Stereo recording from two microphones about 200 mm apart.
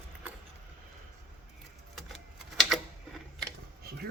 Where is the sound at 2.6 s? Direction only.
Centre (ahead or behind).